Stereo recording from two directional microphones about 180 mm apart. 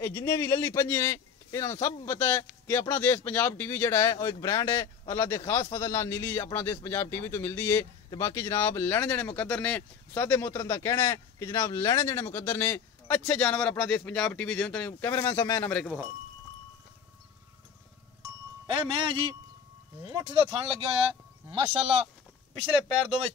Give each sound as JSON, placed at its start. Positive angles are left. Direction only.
{"t": 0.0, "sound": "speech", "side_deg": 15}
{"t": 18.7, "sound": "speech", "side_deg": -30}
{"t": 21.5, "sound": "speech", "side_deg": -30}